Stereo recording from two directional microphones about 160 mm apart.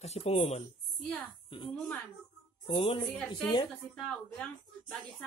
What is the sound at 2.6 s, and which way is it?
Speech, 35° left (ahead or behind).